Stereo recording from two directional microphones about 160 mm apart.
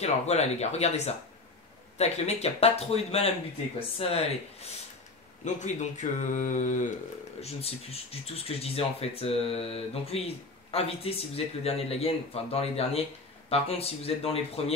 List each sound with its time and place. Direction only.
0.0 s speech: 45° left (ahead or behind)
7.4 s speech: 40° left (ahead or behind)